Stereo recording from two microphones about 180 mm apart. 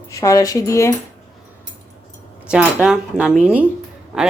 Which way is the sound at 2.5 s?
5° right (ahead or behind).